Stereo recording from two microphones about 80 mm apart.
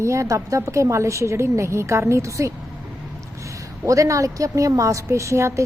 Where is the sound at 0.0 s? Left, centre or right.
Right.